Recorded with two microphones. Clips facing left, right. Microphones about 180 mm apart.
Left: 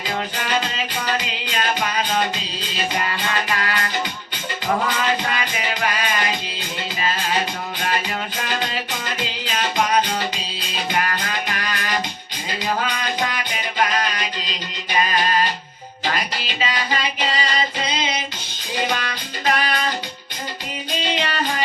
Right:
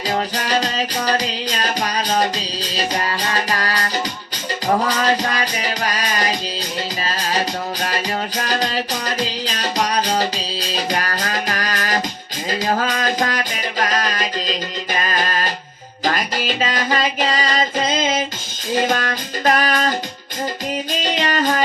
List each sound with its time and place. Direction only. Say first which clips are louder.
0.3 s music: right 3 dB; 40° right (ahead or behind)
4.9 s music: right 3 dB; 40° right (ahead or behind)
21.0 s music: right 3 dB; 45° right (ahead or behind)